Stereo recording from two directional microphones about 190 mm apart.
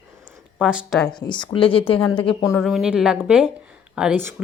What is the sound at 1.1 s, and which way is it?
Speech, 25° left (ahead or behind).